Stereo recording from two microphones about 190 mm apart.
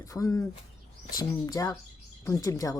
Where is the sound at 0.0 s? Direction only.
15° left (ahead or behind).